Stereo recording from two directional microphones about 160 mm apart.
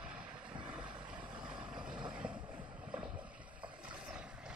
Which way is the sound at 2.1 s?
5° right (ahead or behind).